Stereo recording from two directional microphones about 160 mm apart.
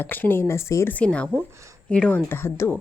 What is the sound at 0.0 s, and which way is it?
Speech, 10° left (ahead or behind).